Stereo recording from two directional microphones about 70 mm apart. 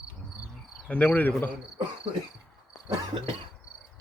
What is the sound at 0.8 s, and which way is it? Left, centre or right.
Cricket, left.